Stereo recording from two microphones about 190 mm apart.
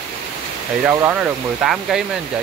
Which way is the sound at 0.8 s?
10° right (ahead or behind).